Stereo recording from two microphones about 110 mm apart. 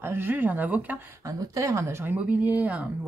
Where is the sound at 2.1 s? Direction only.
15° right (ahead or behind).